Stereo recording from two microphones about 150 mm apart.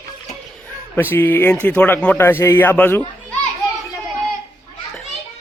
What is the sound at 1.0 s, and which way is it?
Speech, 15° left (ahead or behind).